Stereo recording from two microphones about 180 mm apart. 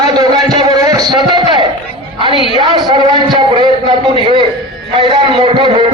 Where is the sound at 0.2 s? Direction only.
20° right (ahead or behind).